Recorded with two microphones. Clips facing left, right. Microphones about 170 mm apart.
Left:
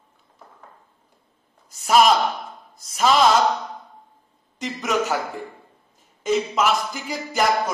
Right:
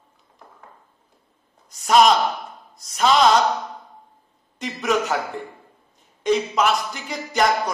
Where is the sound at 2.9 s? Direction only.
5° left (ahead or behind).